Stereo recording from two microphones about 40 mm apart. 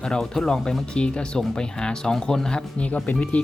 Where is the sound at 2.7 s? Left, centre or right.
Left.